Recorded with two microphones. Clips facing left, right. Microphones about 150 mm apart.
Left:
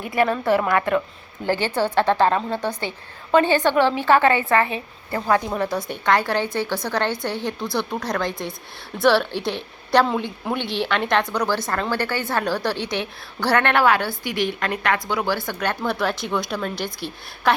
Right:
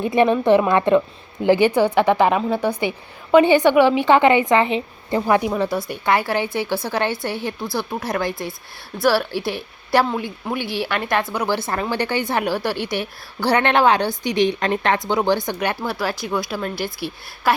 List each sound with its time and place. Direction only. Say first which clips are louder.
0.0 s a woman's voice: right 5 dB; 20° right (ahead or behind); by 17.5 s 5° right (ahead or behind)